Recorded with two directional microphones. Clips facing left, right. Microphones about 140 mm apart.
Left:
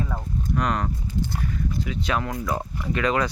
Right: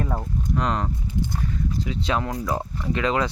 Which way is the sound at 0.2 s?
25° right (ahead or behind).